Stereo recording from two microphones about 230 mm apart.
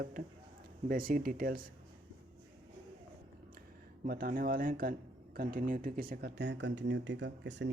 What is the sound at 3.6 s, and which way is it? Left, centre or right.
Speech, right.